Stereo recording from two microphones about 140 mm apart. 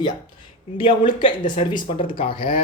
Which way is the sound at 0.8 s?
35° left (ahead or behind).